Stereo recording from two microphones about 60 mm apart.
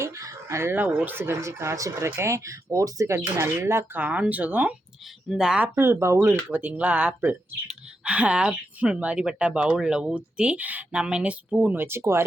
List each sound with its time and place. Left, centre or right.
0.0 s chicken: right
0.7 s speech: right
1.4 s speech: right
3.2 s speech: right
3.9 s a woman's voice: right
5.3 s speech: centre
5.7 s speech: right
6.5 s a woman's voice: right
11.8 s speech: right